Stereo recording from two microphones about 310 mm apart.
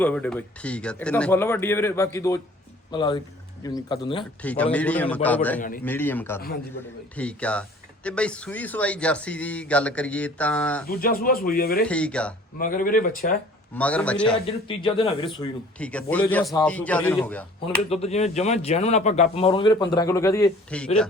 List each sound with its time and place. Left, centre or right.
0.0 s speech: centre
4.4 s a man's voice: centre
10.8 s speech: left
11.8 s a man's voice: centre
12.5 s speech: left
13.7 s a man's voice: centre
14.4 s speech: centre
15.8 s a man's voice: centre
17.8 s a man's voice: centre